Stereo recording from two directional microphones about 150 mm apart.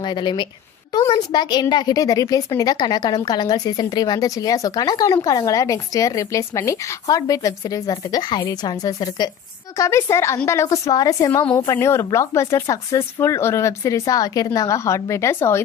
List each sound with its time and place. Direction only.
0.0 s a woman's voice: 30° left (ahead or behind)